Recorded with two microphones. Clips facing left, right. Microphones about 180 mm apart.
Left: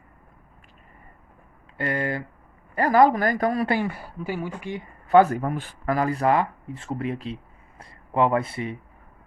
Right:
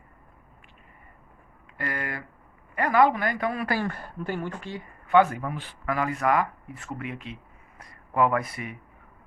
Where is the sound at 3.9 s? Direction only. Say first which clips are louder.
Left 1 dB; 5° left (ahead or behind).